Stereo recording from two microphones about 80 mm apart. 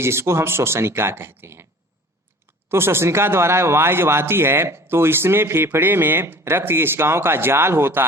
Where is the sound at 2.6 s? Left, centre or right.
Right.